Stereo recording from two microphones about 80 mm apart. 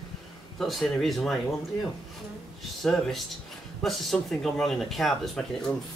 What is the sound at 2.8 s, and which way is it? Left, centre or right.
Speech, centre.